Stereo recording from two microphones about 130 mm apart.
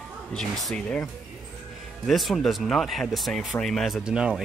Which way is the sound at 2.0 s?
Centre (ahead or behind).